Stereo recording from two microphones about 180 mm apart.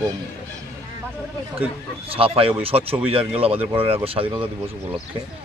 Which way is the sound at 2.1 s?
30° right (ahead or behind).